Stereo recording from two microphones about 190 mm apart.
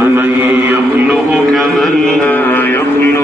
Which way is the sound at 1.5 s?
Centre (ahead or behind).